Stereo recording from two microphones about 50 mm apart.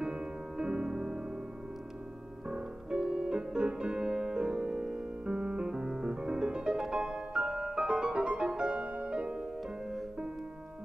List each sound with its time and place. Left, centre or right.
0.0 s music: centre
2.4 s music: right